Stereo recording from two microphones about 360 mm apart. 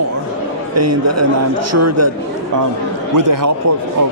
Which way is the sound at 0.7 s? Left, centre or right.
Right.